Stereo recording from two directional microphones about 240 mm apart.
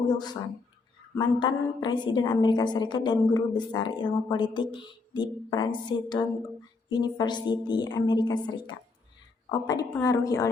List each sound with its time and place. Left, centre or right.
0.1 s a woman's voice: centre
5.9 s a sound: centre
6.9 s a woman's voice: centre